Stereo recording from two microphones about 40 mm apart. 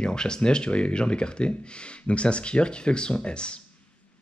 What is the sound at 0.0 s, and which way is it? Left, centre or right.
Speech, left.